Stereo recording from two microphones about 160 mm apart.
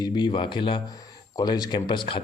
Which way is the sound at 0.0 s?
30° left (ahead or behind).